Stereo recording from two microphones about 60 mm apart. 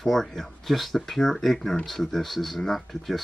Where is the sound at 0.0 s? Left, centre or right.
Centre.